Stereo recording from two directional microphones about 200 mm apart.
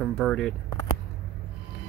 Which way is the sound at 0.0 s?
5° left (ahead or behind).